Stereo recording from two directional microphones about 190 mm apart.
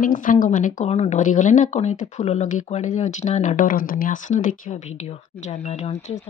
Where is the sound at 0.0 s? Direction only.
45° left (ahead or behind).